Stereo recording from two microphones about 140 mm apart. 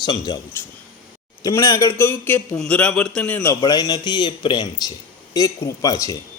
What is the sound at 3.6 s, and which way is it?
Speech, 30° left (ahead or behind).